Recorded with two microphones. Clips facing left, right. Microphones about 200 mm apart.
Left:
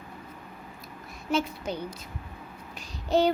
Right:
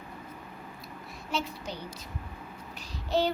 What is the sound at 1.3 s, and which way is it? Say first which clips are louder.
Child singing: left 6 dB; 50° left (ahead or behind).